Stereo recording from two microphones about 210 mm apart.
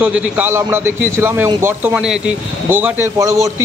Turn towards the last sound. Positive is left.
turn(degrees=-15)  # may be behind; listen again after turning